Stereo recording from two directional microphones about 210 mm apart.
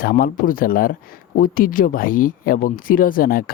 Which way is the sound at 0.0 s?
45° left (ahead or behind).